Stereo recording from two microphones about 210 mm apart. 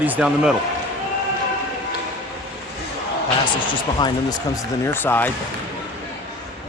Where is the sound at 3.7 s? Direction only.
20° left (ahead or behind).